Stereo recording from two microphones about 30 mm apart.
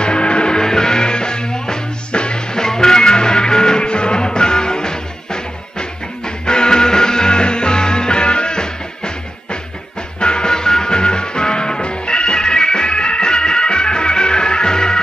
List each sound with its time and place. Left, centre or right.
0.0 s music: left
0.6 s music: left
2.5 s music: left